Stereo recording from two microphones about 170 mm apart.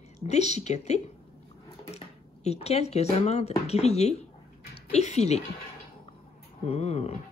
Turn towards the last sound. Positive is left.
turn(degrees=40)  # may be behind; listen again after turning